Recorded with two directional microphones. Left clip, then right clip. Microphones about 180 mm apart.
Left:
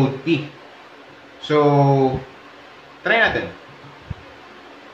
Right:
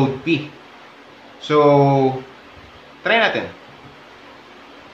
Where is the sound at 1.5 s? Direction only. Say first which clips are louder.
Right 3 dB; 20° right (ahead or behind).